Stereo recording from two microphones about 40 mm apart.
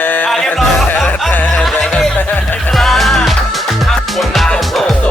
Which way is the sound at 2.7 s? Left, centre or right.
Centre.